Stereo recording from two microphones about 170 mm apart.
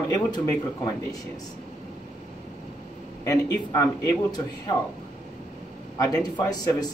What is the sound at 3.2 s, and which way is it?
A man's voice, 20° left (ahead or behind).